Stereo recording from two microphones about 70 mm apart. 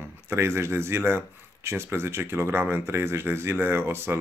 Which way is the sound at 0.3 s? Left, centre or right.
Right.